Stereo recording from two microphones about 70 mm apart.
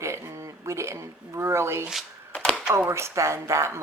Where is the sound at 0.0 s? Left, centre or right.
Right.